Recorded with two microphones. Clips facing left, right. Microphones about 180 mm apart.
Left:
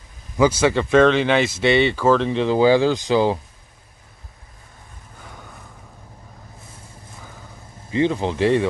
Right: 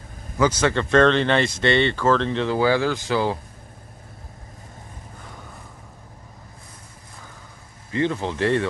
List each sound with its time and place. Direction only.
0.4 s speech: 10° left (ahead or behind)
7.9 s speech: 15° left (ahead or behind)